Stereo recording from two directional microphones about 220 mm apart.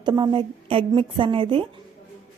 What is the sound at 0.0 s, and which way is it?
Speech, 20° right (ahead or behind).